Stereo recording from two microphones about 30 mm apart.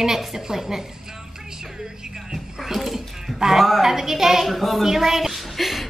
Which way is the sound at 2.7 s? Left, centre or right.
Centre.